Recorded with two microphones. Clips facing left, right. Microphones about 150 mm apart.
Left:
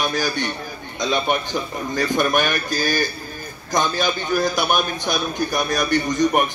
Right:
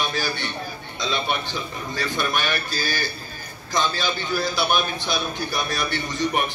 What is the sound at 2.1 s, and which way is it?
A man's voice, 50° left (ahead or behind).